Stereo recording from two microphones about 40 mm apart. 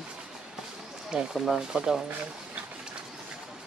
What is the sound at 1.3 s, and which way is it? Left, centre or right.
Speech, centre.